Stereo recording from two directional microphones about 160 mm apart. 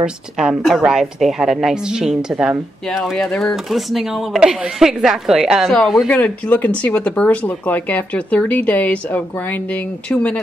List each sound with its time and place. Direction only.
0.0 s a woman's voice: 5° right (ahead or behind)